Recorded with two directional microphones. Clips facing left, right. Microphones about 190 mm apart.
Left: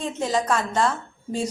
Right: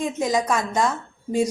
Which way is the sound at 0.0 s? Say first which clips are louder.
Right 2 dB; 10° right (ahead or behind).